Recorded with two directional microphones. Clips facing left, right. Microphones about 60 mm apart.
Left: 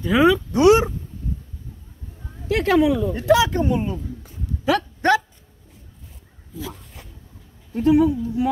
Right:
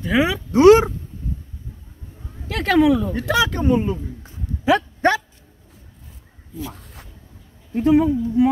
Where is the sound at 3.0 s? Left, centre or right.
Right.